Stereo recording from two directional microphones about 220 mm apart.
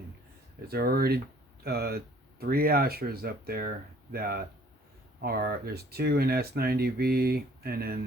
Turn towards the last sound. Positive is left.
turn(degrees=-45)  # may be behind; listen again after turning